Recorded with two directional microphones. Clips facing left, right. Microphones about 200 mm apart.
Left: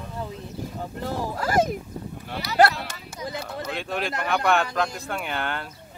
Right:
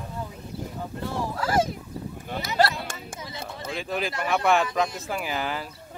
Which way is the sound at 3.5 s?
Centre (ahead or behind).